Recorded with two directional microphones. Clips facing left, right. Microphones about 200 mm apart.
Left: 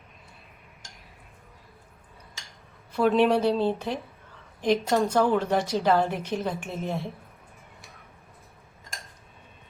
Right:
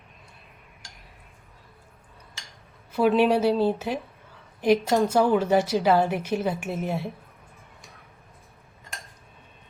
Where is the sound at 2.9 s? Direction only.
5° right (ahead or behind).